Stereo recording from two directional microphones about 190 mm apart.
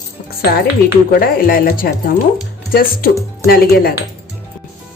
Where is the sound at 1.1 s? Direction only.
50° left (ahead or behind).